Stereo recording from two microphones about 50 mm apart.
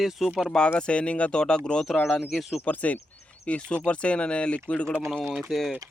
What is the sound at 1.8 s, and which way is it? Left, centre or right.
Speech, centre.